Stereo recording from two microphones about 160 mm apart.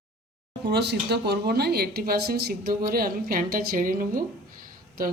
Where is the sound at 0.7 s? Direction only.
90° right.